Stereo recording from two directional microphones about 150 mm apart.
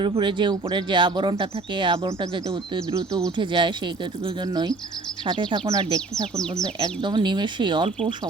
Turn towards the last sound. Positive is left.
turn(degrees=-30)  # may be behind; listen again after turning